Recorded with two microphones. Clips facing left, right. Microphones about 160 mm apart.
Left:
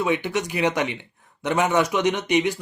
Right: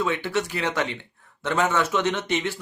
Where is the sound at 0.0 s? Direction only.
15° left (ahead or behind).